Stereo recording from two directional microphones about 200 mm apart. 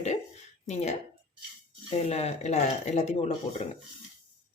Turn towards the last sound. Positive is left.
turn(degrees=35)  # may be behind; listen again after turning